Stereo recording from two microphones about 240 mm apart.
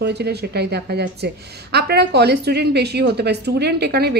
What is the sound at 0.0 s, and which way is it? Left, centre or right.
A woman's voice, right.